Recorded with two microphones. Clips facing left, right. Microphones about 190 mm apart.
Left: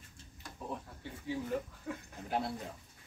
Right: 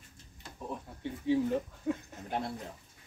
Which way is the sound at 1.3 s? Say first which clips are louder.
Right 8 dB; 25° right (ahead or behind).